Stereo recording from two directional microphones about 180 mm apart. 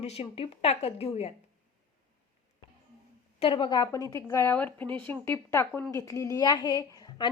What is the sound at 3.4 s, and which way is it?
A woman's voice, 30° left (ahead or behind).